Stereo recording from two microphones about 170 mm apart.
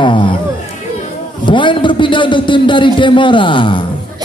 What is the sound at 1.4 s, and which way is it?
A man's voice, 30° left (ahead or behind).